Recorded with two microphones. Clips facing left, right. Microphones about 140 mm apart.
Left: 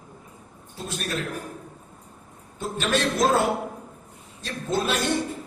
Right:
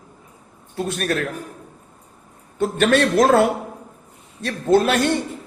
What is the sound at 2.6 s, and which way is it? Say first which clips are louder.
Speech: right 8 dB; 65° right (ahead or behind).